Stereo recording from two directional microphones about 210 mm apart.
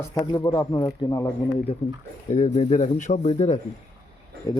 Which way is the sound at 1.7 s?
30° left (ahead or behind).